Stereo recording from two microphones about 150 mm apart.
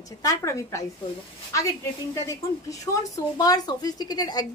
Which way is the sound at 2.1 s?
20° left (ahead or behind).